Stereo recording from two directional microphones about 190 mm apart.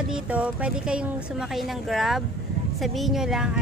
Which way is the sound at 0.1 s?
5° right (ahead or behind).